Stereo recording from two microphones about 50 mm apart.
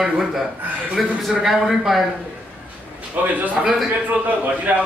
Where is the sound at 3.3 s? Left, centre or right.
Right.